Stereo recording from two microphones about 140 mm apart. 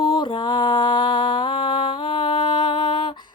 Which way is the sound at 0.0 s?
35° left (ahead or behind).